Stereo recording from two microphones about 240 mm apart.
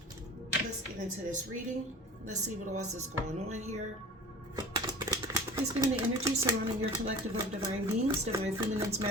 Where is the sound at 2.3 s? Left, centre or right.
Right.